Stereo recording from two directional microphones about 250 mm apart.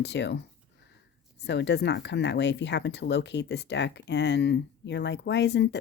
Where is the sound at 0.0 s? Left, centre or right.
Left.